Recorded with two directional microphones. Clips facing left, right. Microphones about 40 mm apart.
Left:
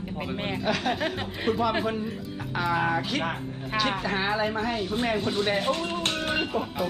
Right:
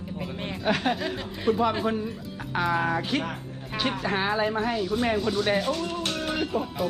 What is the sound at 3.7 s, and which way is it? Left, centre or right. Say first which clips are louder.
Speech: left 2 dB; left.